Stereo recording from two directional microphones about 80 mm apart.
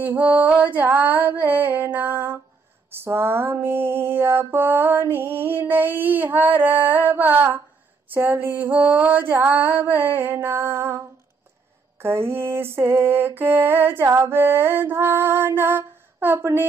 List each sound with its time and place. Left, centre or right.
0.0 s mantra: right
12.0 s mantra: right